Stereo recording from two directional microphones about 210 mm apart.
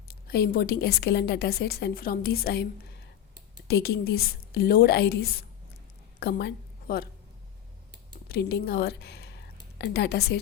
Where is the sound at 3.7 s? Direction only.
50° left (ahead or behind).